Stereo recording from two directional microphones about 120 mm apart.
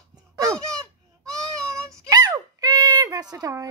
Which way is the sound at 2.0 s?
30° right (ahead or behind).